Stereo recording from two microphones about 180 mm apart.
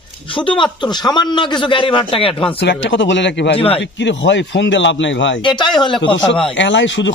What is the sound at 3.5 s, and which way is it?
Speech, 30° left (ahead or behind).